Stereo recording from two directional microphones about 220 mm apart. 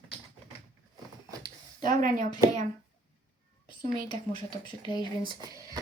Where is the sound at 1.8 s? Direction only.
40° right (ahead or behind).